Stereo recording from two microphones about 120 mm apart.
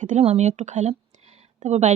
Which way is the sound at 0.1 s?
65° right (ahead or behind).